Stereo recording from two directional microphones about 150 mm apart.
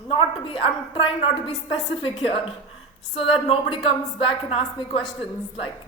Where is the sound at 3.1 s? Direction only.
35° left (ahead or behind).